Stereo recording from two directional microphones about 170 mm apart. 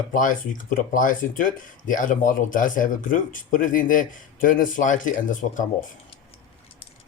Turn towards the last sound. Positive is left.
turn(degrees=50)  # may be behind; listen again after turning